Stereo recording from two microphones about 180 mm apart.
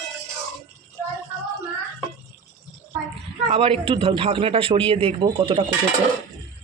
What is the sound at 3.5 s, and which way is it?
A man's voice, 30° right (ahead or behind).